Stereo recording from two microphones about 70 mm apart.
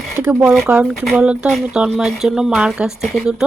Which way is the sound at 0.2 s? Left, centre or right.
Right.